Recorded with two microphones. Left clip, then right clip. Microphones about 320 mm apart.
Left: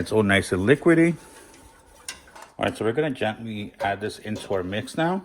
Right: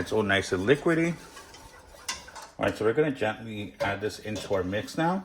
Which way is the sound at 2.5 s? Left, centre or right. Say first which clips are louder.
Left 1 dB; left.